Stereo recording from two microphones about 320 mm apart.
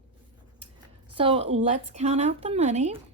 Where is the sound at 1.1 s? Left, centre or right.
Centre.